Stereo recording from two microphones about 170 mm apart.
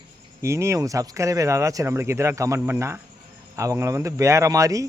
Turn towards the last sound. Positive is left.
turn(degrees=-20)  # may be behind; listen again after turning